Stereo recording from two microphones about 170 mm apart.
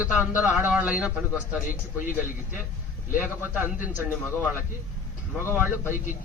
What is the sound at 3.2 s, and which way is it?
Speech, 10° right (ahead or behind).